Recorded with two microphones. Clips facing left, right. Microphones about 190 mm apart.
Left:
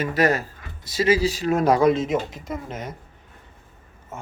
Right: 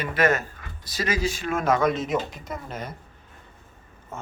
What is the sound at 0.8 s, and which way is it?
Speech, 25° left (ahead or behind).